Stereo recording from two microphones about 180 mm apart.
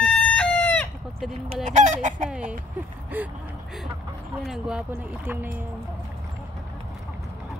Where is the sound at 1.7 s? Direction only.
40° right (ahead or behind).